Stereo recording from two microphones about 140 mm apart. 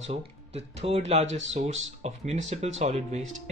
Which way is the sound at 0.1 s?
50° right (ahead or behind).